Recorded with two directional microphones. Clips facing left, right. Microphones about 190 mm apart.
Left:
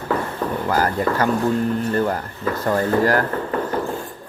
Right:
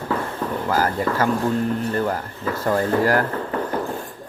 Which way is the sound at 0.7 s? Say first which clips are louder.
Left 1 dB; 5° right (ahead or behind).